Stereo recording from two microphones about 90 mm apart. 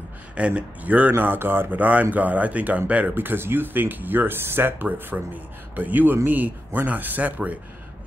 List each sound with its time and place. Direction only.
0.4 s speech: 15° right (ahead or behind)